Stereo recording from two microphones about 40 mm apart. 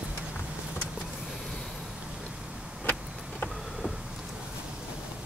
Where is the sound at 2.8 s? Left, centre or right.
Left.